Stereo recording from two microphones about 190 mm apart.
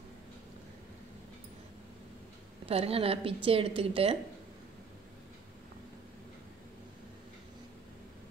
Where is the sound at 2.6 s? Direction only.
30° right (ahead or behind).